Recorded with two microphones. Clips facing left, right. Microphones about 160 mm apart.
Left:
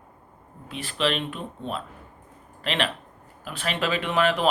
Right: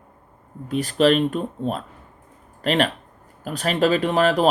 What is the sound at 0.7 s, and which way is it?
Speech, 40° right (ahead or behind).